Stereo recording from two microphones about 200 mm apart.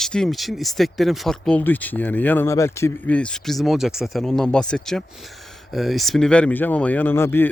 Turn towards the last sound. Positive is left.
turn(degrees=10)  # may be behind; listen again after turning